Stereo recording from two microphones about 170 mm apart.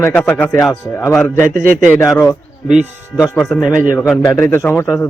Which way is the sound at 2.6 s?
5° right (ahead or behind).